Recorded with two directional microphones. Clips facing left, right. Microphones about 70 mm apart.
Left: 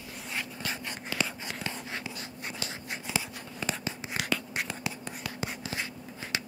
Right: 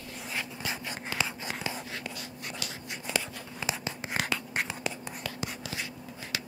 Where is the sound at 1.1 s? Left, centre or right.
Right.